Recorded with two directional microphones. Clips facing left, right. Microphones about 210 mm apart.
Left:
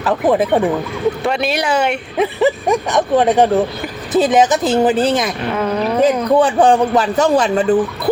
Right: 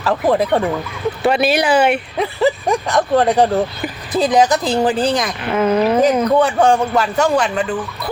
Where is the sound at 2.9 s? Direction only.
20° left (ahead or behind).